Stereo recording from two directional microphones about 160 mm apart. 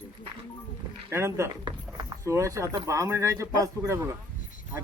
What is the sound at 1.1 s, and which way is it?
Speech, 15° right (ahead or behind).